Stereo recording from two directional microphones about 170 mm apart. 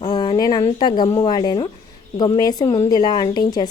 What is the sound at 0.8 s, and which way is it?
A woman's voice, 25° left (ahead or behind).